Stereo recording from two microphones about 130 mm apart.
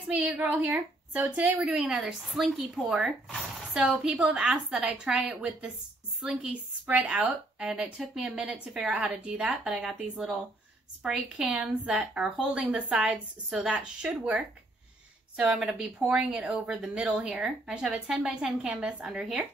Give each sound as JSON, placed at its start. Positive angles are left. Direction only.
{"t": 0.1, "sound": "a woman's voice", "side_deg": -10}